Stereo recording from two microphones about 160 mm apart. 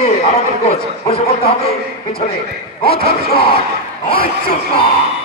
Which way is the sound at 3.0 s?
75° left (ahead or behind).